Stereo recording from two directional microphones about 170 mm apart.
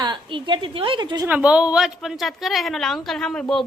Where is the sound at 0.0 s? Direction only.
30° right (ahead or behind).